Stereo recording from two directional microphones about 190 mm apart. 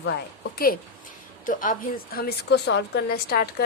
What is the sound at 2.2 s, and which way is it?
Speech, 60° left (ahead or behind).